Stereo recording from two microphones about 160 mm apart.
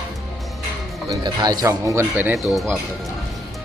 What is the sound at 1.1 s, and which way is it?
Speech, 25° right (ahead or behind).